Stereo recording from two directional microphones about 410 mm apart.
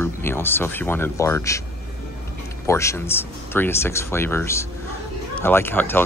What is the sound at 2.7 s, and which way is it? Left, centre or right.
Speech, centre.